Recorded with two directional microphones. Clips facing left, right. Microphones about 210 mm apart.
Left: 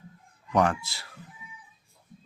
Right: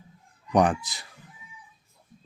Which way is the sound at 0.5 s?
15° right (ahead or behind).